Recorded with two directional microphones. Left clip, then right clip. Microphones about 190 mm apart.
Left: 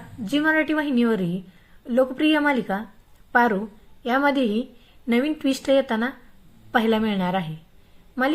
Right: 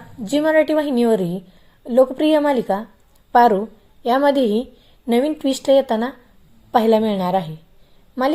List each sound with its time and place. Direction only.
0.3 s a woman's voice: 20° right (ahead or behind)